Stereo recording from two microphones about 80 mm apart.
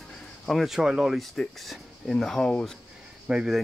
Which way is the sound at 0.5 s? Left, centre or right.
Centre.